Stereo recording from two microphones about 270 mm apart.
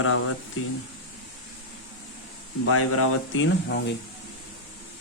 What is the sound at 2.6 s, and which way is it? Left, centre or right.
Speech, left.